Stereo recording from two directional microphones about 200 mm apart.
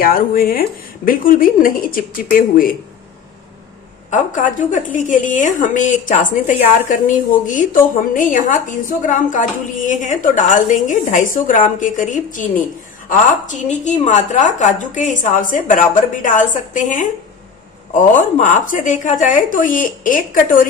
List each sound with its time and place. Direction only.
0.0 s speech: 45° left (ahead or behind)
4.1 s a woman's voice: 40° left (ahead or behind)